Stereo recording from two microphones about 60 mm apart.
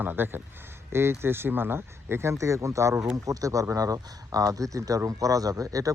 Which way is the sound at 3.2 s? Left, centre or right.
Right.